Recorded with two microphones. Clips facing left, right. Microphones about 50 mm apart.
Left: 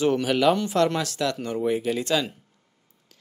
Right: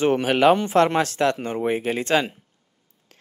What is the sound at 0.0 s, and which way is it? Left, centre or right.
Speech, right.